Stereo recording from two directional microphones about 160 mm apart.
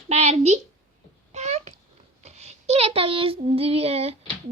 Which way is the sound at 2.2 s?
45° right (ahead or behind).